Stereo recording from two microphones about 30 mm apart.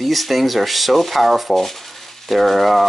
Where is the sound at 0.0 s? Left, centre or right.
Centre.